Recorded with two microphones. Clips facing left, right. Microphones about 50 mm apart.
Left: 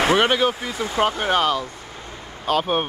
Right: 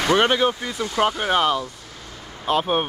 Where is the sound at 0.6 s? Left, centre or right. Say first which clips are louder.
Left 1 dB; left.